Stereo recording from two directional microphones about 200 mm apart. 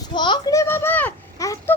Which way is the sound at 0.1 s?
20° left (ahead or behind).